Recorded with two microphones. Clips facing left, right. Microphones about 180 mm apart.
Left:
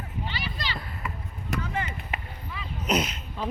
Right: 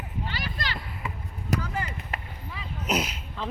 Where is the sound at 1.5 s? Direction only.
35° right (ahead or behind).